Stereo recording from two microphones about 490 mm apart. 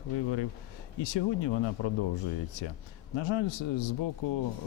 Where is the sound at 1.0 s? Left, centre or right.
Left.